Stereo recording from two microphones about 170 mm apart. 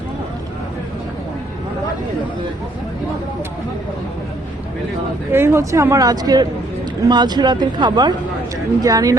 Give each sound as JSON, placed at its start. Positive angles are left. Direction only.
{"t": 5.3, "sound": "speech", "side_deg": -15}